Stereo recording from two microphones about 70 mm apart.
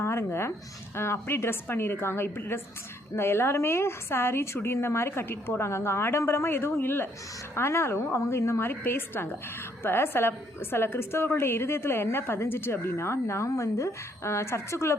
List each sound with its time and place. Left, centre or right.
0.0 s a woman's voice: left